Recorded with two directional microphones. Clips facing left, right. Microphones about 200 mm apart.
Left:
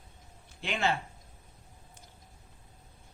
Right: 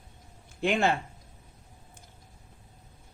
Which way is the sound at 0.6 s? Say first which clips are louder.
Right 6 dB; 50° right (ahead or behind).